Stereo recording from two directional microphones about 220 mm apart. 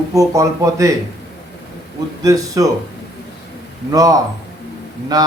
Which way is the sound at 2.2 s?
15° right (ahead or behind).